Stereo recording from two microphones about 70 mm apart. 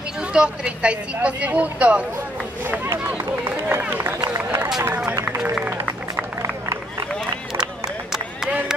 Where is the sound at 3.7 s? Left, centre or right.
Right.